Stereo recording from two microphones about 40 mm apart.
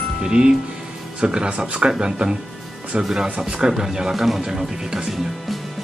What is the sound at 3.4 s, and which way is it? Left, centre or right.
Speech, centre.